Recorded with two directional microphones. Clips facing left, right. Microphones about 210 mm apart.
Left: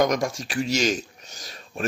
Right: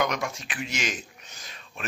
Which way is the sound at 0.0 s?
40° left (ahead or behind).